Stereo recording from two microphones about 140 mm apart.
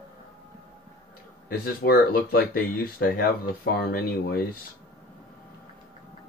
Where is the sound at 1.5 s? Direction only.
90° left.